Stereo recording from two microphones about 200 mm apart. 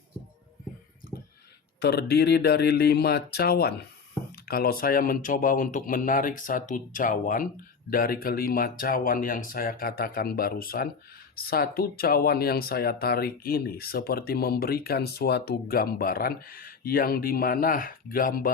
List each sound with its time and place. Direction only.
1.8 s speech: 55° left (ahead or behind)